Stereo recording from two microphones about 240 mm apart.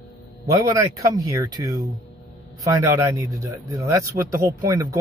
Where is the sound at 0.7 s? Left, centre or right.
Centre.